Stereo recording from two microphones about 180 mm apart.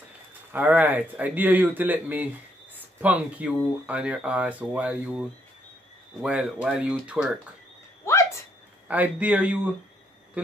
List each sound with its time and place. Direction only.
0.5 s speech: 10° right (ahead or behind)
6.2 s speech: 5° right (ahead or behind)
8.0 s a sound: 15° left (ahead or behind)
8.8 s speech: 10° right (ahead or behind)